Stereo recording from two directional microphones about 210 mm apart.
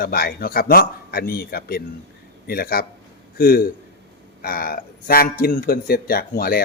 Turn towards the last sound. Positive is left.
turn(degrees=45)  # may be behind; listen again after turning